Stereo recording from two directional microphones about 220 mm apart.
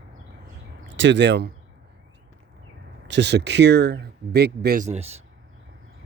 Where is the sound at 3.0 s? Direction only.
55° right (ahead or behind); by 5.2 s 30° right (ahead or behind).